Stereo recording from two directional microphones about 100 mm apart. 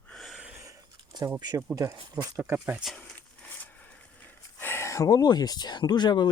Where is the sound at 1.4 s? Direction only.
40° right (ahead or behind).